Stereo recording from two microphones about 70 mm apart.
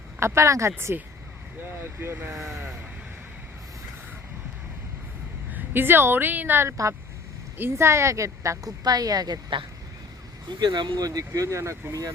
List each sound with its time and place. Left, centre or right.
0.2 s a woman's voice: right
1.6 s speech: right
5.5 s a woman's voice: right
6.7 s a woman's voice: right
8.8 s speech: right
10.5 s speech: right
11.3 s a woman's voice: right